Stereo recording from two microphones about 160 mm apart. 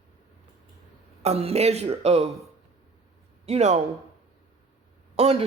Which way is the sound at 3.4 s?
45° right (ahead or behind).